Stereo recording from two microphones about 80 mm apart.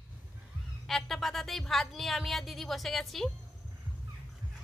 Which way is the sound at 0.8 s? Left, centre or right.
Centre.